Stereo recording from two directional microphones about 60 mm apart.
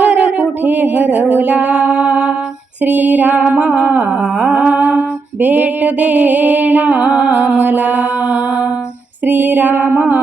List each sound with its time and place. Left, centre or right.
0.0 s music: right
2.8 s a sound: right
7.1 s music: centre